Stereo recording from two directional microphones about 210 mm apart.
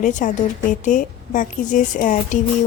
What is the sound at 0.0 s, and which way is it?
Speech, 35° left (ahead or behind).